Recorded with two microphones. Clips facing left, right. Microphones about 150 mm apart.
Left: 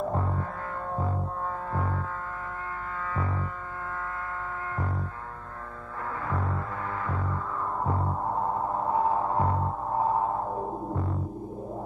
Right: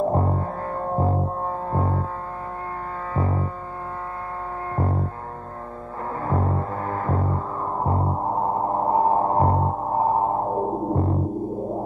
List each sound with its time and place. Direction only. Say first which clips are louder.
0.0 s music: right 7 dB; 35° right (ahead or behind)
1.7 s foghorn: right 6 dB; 35° right (ahead or behind)
3.2 s foghorn: right 9 dB; 35° right (ahead or behind)
4.7 s music: right 10 dB; 40° right (ahead or behind)
6.2 s music: right 9 dB; 35° right (ahead or behind)